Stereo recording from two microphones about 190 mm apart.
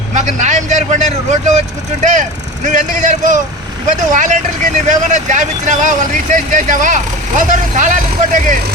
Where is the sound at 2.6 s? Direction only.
40° right (ahead or behind).